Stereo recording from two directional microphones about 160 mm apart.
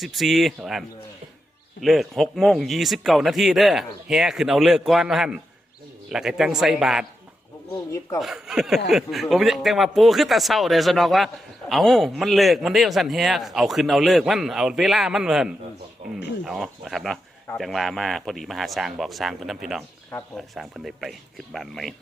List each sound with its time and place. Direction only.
0.0 s a man's voice: centre (ahead or behind)
7.9 s speech: 20° left (ahead or behind)
8.2 s a man's voice: centre (ahead or behind)